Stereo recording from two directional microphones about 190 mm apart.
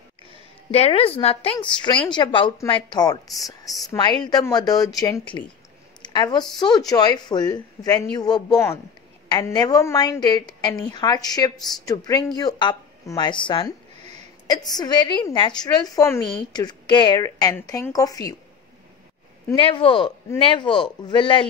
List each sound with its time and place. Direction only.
0.7 s a woman's voice: 30° left (ahead or behind)
19.5 s a woman's voice: 25° left (ahead or behind)